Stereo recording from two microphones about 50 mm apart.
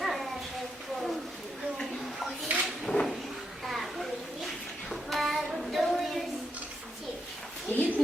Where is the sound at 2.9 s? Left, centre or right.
Left.